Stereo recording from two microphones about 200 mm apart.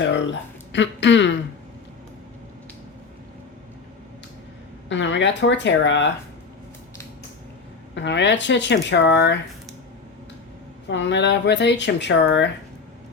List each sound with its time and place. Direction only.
0.0 s speech: 65° left (ahead or behind)
4.9 s speech: 65° left (ahead or behind)
7.9 s speech: 60° left (ahead or behind)
10.8 s speech: 60° left (ahead or behind)